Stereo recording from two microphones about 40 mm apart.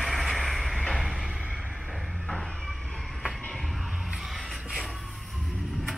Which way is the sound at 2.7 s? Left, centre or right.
Centre.